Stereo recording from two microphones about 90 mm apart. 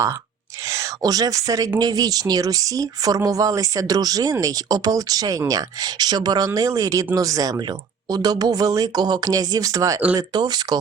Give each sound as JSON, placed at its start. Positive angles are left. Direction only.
{"t": 0.6, "sound": "speech", "side_deg": -35}